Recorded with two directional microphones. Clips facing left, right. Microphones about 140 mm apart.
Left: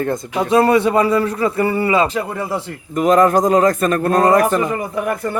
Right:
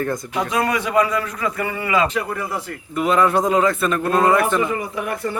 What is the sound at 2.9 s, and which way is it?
A man's voice, 40° left (ahead or behind).